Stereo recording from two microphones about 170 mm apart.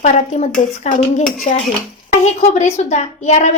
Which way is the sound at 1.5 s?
40° left (ahead or behind).